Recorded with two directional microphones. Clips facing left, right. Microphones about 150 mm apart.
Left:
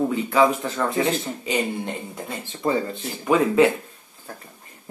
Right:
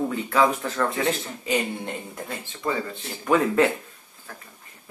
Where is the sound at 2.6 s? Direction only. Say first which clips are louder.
Left 5 dB; 25° left (ahead or behind).